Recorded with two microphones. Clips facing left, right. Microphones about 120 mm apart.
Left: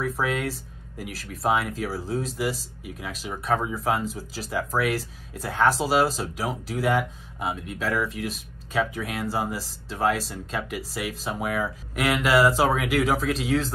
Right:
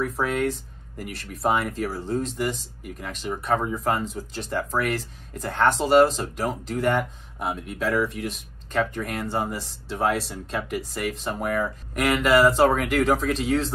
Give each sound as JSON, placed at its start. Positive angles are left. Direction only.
{"t": 0.0, "sound": "speech", "side_deg": 0}